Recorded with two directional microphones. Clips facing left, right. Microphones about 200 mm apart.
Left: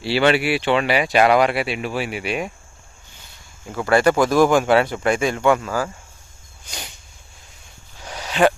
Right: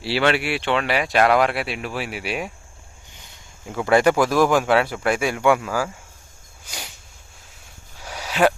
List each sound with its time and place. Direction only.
0.0 s speech: centre (ahead or behind)
3.8 s speech: 15° right (ahead or behind)
4.1 s speech: 5° right (ahead or behind)
6.7 s a sound: 5° right (ahead or behind)